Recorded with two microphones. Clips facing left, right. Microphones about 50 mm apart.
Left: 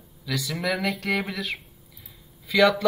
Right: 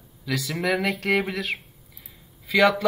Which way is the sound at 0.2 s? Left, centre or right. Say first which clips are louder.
Right 2 dB; right.